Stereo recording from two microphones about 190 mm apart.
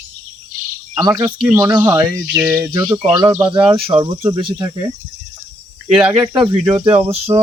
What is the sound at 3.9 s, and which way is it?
Speech, 35° right (ahead or behind).